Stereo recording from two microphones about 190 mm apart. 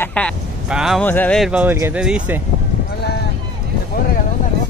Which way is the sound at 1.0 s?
10° left (ahead or behind).